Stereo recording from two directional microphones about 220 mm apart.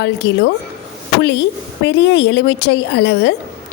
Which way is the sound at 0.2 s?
50° left (ahead or behind).